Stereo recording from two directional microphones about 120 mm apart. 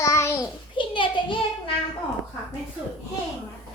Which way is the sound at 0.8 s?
45° left (ahead or behind).